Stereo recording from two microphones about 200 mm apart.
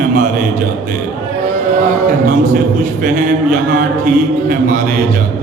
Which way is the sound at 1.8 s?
40° right (ahead or behind).